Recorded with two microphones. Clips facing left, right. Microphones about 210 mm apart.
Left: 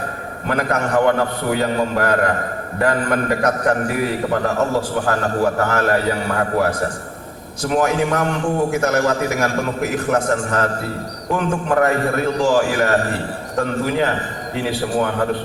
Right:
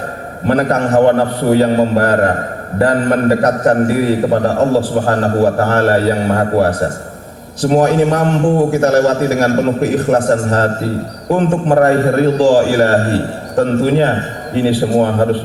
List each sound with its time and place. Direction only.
0.4 s a man's voice: 30° right (ahead or behind)